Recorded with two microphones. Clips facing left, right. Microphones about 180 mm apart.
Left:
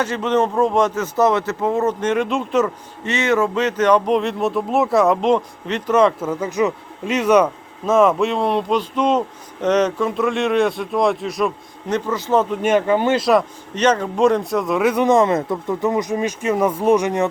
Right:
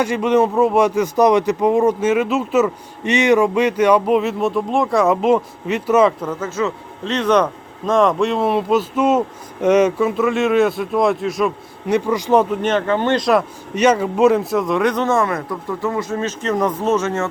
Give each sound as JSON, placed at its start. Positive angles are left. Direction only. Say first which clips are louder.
{"t": 0.0, "sound": "speech", "louder": "right 3 dB", "side_deg": -10}
{"t": 6.2, "sound": "speech", "louder": "left 2 dB", "side_deg": 15}
{"t": 11.9, "sound": "speech", "louder": "right 4 dB", "side_deg": -10}
{"t": 12.6, "sound": "speech", "louder": "left 1 dB", "side_deg": 10}
{"t": 13.7, "sound": "speech", "louder": "right 2 dB", "side_deg": -10}
{"t": 15.0, "sound": "speech", "louder": "left 3 dB", "side_deg": 20}